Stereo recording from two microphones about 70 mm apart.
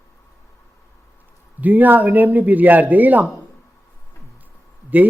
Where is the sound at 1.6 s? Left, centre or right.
Right.